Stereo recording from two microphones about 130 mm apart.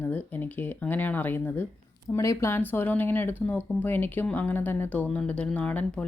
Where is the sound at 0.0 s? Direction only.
15° left (ahead or behind).